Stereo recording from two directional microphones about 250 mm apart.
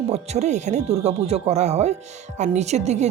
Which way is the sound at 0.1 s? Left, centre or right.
Right.